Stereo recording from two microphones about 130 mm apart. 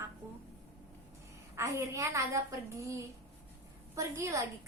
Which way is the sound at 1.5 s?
20° right (ahead or behind).